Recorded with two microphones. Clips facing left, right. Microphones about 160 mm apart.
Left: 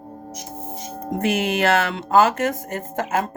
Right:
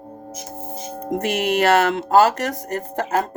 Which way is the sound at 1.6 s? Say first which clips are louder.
Right 6 dB; 40° right (ahead or behind).